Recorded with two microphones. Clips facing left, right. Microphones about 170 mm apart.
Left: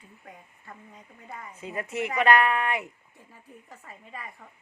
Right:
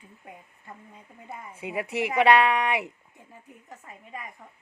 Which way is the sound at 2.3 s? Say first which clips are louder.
Right 1 dB; 15° right (ahead or behind).